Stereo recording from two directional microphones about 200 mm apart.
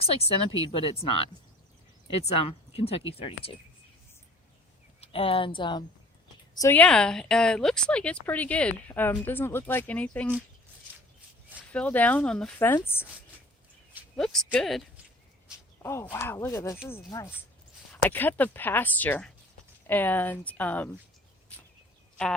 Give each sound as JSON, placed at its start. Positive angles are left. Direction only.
{"t": 0.3, "sound": "speech", "side_deg": 30}
{"t": 4.9, "sound": "a woman's voice", "side_deg": 30}
{"t": 6.6, "sound": "a woman's voice", "side_deg": 10}
{"t": 11.7, "sound": "a woman's voice", "side_deg": 5}
{"t": 14.2, "sound": "speech", "side_deg": 5}
{"t": 15.8, "sound": "a woman's voice", "side_deg": 15}